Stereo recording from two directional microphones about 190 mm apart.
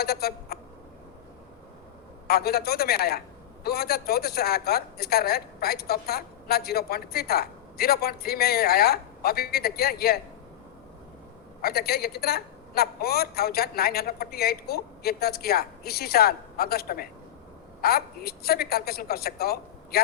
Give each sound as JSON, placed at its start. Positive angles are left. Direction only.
{"t": 0.0, "sound": "a sound", "side_deg": 55}
{"t": 2.2, "sound": "a woman's voice", "side_deg": 55}
{"t": 11.6, "sound": "a woman's voice", "side_deg": 55}